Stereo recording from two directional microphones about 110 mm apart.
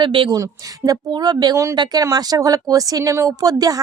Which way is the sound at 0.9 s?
40° right (ahead or behind).